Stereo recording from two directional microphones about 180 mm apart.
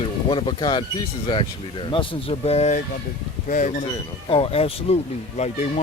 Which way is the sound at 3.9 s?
30° left (ahead or behind).